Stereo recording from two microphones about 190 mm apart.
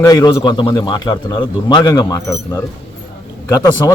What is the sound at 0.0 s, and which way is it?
A man's voice, 20° left (ahead or behind).